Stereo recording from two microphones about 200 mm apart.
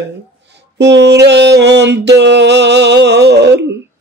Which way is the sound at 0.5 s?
60° right (ahead or behind).